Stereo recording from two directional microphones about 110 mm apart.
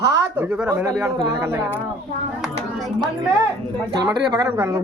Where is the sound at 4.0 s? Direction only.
35° right (ahead or behind).